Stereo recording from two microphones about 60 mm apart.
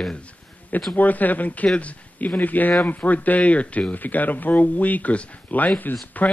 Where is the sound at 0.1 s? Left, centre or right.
Left.